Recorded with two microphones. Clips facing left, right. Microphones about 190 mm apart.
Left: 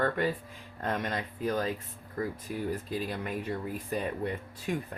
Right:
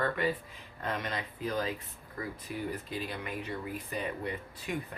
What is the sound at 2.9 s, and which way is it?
Speech, 45° left (ahead or behind).